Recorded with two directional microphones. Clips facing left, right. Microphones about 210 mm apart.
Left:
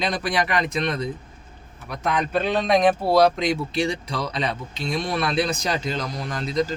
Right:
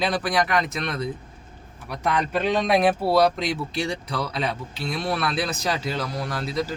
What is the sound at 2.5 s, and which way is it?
Speech, 10° right (ahead or behind).